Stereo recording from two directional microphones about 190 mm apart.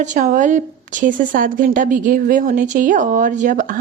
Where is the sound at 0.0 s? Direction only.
40° right (ahead or behind).